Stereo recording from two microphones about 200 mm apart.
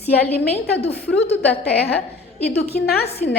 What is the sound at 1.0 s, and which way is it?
A woman's voice, 55° left (ahead or behind).